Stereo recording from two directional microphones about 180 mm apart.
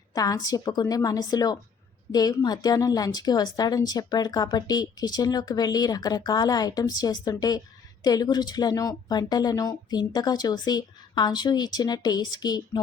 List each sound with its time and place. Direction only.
0.1 s a woman's voice: 20° left (ahead or behind)